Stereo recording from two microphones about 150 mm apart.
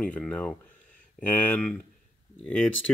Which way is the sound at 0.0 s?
5° left (ahead or behind).